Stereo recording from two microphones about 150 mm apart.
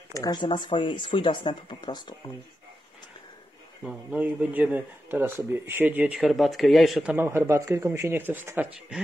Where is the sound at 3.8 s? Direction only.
10° right (ahead or behind).